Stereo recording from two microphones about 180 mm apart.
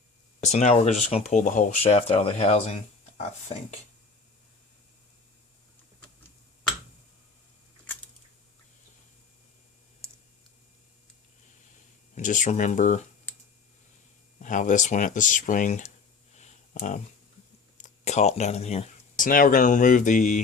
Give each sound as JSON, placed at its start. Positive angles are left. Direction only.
{"t": 0.4, "sound": "speech", "side_deg": 40}
{"t": 12.1, "sound": "speech", "side_deg": 45}
{"t": 14.4, "sound": "speech", "side_deg": 45}
{"t": 16.3, "sound": "a sound", "side_deg": 40}
{"t": 17.7, "sound": "speech", "side_deg": 40}